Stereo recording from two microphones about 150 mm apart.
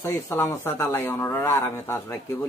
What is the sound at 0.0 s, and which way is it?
Speech, 15° left (ahead or behind).